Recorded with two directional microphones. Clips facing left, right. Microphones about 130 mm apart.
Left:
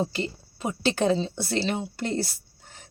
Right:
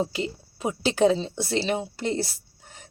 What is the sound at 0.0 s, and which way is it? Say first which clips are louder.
Speech: right 1 dB; 5° right (ahead or behind).